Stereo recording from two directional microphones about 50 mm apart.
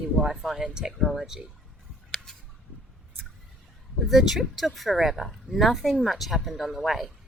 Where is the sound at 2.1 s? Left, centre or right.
Centre.